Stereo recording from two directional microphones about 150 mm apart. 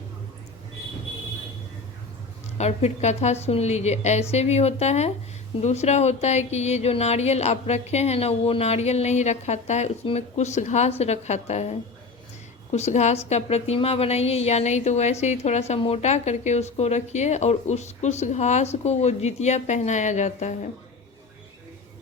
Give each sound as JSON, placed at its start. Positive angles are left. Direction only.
{"t": 2.6, "sound": "a woman's voice", "side_deg": 45}